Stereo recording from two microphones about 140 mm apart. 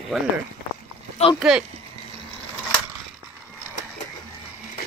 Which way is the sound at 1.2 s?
50° left (ahead or behind).